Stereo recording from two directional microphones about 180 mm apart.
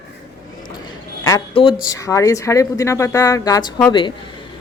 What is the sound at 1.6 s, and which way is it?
Speech, 30° left (ahead or behind).